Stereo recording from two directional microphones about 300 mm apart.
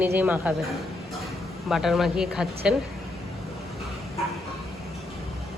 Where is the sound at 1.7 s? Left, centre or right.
Centre.